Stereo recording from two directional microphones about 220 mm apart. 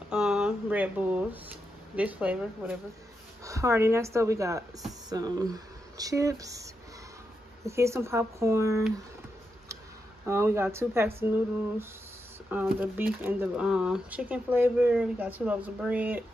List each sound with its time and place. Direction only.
0.1 s a sound: 5° right (ahead or behind)
2.0 s speech: 5° right (ahead or behind)
10.2 s speech: 10° right (ahead or behind)
12.4 s speech: 5° right (ahead or behind)